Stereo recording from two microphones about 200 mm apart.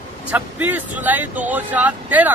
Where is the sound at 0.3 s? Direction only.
5° right (ahead or behind).